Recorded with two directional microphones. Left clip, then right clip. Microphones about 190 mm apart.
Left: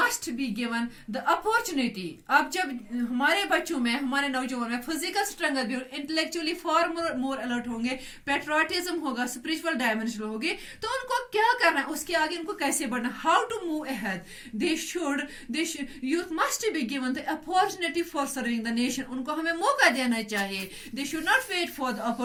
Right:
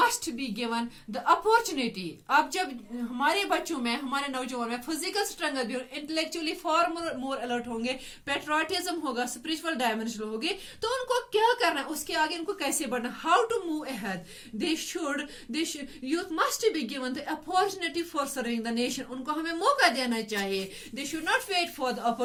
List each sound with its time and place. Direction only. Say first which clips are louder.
0.0 s a woman's voice: right 1 dB; 45° right (ahead or behind)